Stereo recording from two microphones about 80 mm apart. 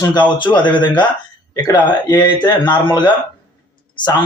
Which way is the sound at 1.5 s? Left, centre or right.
Left.